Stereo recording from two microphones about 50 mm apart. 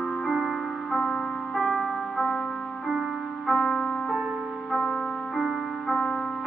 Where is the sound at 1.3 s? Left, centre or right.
Centre.